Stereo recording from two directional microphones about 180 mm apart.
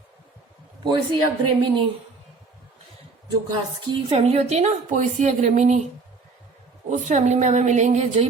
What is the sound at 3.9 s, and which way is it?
A woman's voice, 30° right (ahead or behind).